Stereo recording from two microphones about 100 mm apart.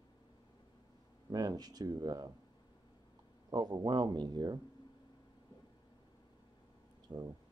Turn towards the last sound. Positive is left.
turn(degrees=-45)  # may be behind; listen again after turning